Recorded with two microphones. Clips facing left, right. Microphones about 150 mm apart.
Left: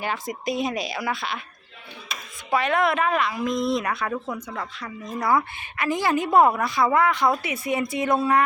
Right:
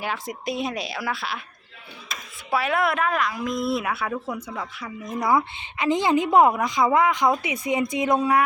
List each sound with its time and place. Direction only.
0.0 s speech: centre (ahead or behind)
2.5 s a woman's voice: 5° right (ahead or behind)